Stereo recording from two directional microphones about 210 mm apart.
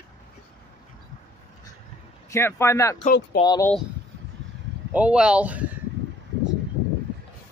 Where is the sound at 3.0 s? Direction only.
35° left (ahead or behind).